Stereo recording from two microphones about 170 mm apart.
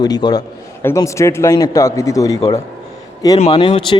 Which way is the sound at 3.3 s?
35° left (ahead or behind).